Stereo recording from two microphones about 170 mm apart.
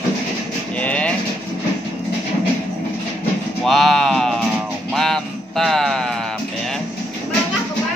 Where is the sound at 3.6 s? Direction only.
Centre (ahead or behind).